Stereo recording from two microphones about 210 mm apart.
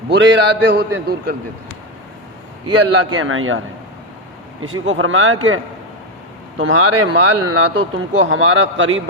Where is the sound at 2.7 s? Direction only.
80° right.